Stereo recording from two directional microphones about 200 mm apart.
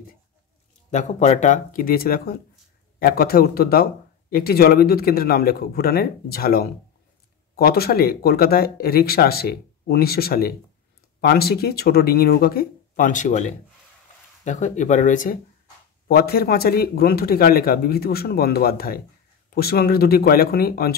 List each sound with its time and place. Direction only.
0.8 s a man's voice: 35° left (ahead or behind)